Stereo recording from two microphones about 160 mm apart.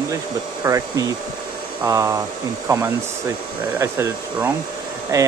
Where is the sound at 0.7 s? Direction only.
20° right (ahead or behind).